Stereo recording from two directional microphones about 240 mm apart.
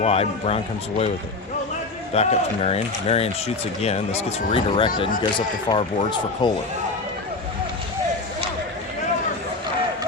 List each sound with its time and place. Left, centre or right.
0.0 s speech: left
2.1 s speech: left